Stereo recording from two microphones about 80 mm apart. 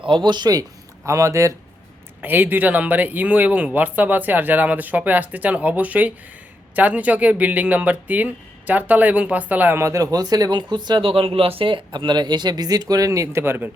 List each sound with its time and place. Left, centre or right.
0.3 s speech: right
1.0 s speech: right
2.2 s speech: right
10.6 s speech: right